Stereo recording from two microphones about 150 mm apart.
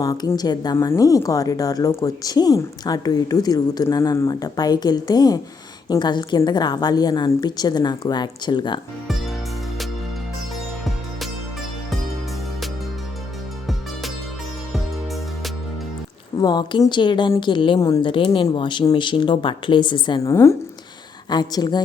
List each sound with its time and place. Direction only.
0.0 s a woman's voice: 25° left (ahead or behind)
16.4 s a woman's voice: 30° left (ahead or behind)
20.2 s a woman's voice: 20° left (ahead or behind)